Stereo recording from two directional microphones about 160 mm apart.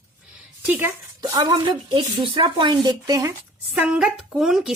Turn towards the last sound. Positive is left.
turn(degrees=0)  # may be behind; listen again after turning